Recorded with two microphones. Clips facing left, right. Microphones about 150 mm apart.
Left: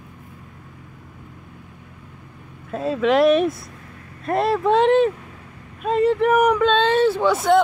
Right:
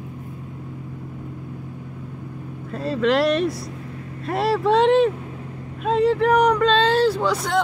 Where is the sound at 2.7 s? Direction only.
Centre (ahead or behind).